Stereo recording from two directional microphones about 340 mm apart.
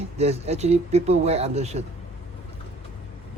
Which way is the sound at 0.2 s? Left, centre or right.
Centre.